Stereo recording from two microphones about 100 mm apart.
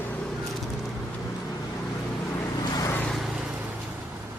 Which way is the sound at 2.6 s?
40° left (ahead or behind).